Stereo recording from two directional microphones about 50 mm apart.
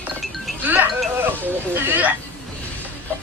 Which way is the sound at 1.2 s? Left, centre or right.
Right.